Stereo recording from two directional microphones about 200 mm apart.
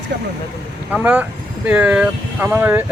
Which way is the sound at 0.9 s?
10° right (ahead or behind).